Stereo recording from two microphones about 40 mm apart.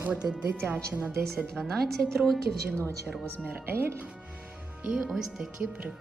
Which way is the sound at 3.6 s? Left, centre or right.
Right.